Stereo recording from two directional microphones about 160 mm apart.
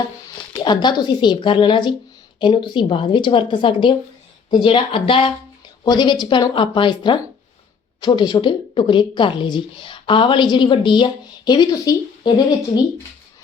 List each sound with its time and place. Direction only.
0.5 s a woman's voice: 30° left (ahead or behind)